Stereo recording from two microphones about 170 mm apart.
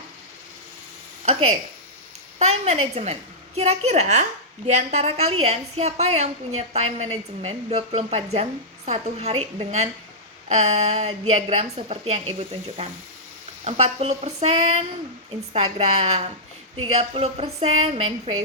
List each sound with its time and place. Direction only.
1.2 s a woman's voice: 35° right (ahead or behind)